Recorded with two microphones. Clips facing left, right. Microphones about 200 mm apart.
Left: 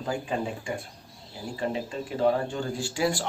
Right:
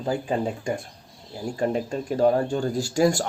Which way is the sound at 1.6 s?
45° right (ahead or behind).